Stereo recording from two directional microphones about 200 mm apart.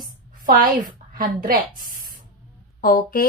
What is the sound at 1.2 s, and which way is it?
Speech, 45° right (ahead or behind).